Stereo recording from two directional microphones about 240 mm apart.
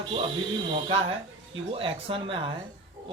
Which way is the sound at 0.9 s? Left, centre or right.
Right.